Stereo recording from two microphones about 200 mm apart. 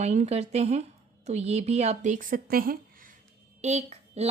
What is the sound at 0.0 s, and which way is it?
A woman's voice, 35° right (ahead or behind).